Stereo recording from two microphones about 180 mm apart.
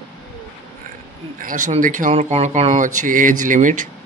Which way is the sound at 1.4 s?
45° right (ahead or behind).